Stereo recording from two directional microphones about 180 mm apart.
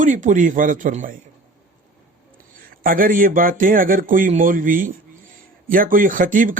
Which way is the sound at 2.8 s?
50° right (ahead or behind).